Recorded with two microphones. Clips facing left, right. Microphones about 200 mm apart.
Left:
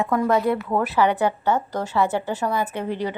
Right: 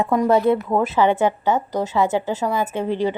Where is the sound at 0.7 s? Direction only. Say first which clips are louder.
Right 3 dB; 20° right (ahead or behind).